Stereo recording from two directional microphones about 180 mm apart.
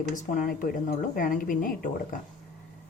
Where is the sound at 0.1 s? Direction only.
50° left (ahead or behind).